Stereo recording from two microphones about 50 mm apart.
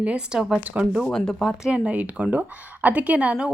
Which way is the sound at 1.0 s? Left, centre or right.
Centre.